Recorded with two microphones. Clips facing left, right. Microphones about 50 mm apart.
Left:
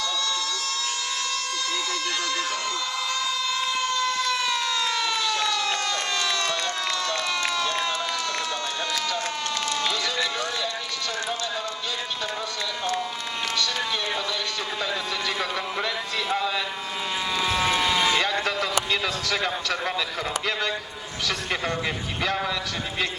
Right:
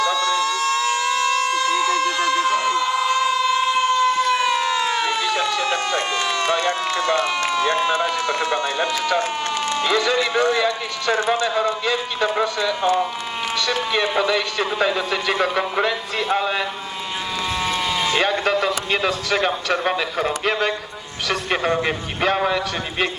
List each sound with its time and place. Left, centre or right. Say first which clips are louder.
0.0 s siren: right 9 dB; right
6.9 s a sound: right 7 dB; right
9.6 s speech: right 9 dB; right
11.5 s a man's voice: right 10 dB; right
14.3 s a man's voice: right 8 dB; right
14.8 s a man's voice: right 8 dB; right
17.5 s vehicle: even; centre
18.2 s music: right 6 dB; right
18.9 s a man's voice: right 5 dB; right